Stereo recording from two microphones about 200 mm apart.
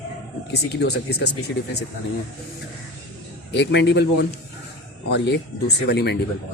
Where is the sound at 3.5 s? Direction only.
60° left (ahead or behind).